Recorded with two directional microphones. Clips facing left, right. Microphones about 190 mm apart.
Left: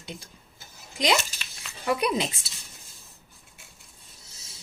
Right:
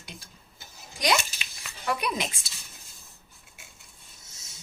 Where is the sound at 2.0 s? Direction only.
30° left (ahead or behind).